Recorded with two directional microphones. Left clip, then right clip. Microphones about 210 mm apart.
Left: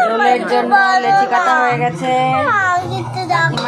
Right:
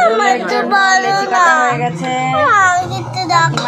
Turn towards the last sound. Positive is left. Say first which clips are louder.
# right 3 dB
turn(degrees=-50)  # may be behind; listen again after turning